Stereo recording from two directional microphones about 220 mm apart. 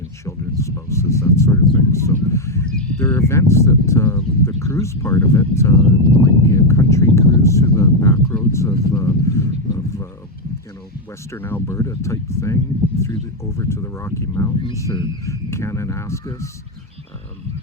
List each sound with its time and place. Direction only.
0.3 s a sound: 15° left (ahead or behind)
2.3 s speech: 10° left (ahead or behind)
11.3 s speech: 10° left (ahead or behind)